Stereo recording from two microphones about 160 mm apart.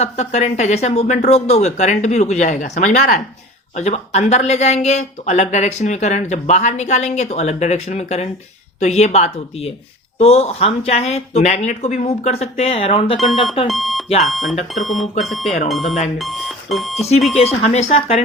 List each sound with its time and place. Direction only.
0.0 s speech: 45° left (ahead or behind)
13.1 s speech: centre (ahead or behind)
17.3 s speech: 45° left (ahead or behind)